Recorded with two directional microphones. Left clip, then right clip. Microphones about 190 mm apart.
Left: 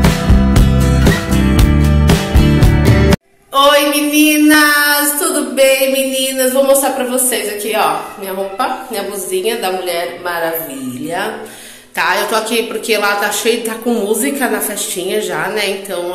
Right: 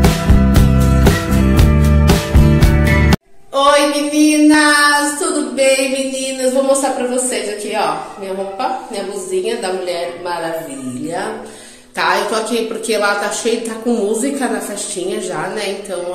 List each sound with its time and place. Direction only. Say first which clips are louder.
0.0 s music: left 1 dB; centre (ahead or behind)
8.5 s a woman's voice: left 3 dB; centre (ahead or behind)
12.0 s a woman's voice: left 1 dB; 5° right (ahead or behind)